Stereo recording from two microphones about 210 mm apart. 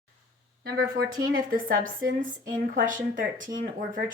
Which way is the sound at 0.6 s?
45° right (ahead or behind).